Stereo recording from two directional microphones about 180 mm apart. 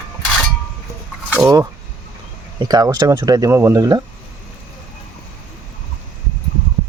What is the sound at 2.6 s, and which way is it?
Speech, 20° right (ahead or behind).